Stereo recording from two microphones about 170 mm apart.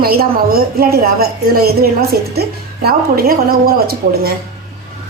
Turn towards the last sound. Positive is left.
turn(degrees=-65)  # may be behind; listen again after turning